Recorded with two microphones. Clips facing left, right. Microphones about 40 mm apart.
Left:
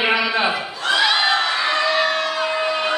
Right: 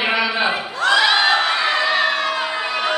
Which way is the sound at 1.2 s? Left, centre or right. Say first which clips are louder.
Right 2 dB; centre.